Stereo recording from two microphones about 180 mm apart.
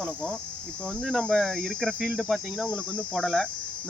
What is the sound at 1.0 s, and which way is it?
Cricket, centre (ahead or behind).